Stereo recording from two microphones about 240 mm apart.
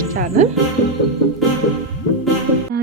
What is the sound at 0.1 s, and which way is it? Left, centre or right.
Speech, right.